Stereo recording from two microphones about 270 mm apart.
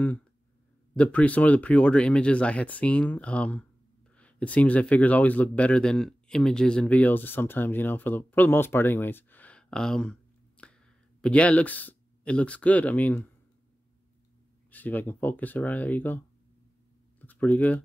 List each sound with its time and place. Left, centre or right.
0.9 s a man's voice: centre
10.6 s a sound: centre
11.1 s a man's voice: centre
14.7 s speech: centre
17.2 s speech: centre